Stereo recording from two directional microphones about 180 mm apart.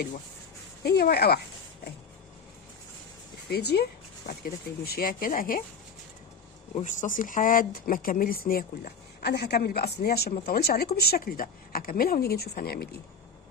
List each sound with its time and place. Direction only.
0.8 s speech: 60° left (ahead or behind)
3.5 s speech: 65° left (ahead or behind)
6.8 s speech: 45° left (ahead or behind)